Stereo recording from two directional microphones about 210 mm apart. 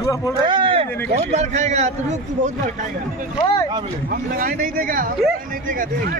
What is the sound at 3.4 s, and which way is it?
Speech, 20° left (ahead or behind).